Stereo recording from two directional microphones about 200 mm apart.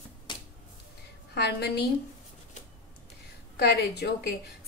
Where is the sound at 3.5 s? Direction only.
55° left (ahead or behind).